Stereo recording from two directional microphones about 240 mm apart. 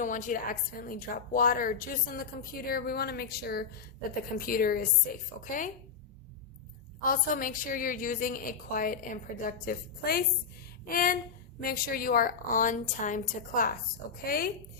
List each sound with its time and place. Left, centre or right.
0.0 s a woman's voice: left
7.0 s a woman's voice: left